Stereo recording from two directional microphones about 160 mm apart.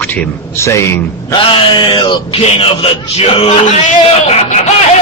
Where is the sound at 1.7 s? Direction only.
30° left (ahead or behind).